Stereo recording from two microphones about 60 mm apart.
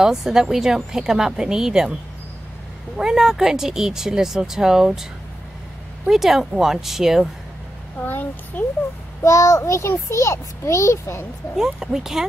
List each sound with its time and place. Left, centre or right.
0.0 s speech: centre
3.0 s speech: centre
6.0 s speech: centre
8.0 s a child's voice: left
9.2 s a child's voice: left
11.5 s speech: centre